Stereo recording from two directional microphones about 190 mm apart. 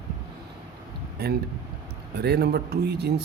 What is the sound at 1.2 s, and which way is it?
Speech, 60° right (ahead or behind).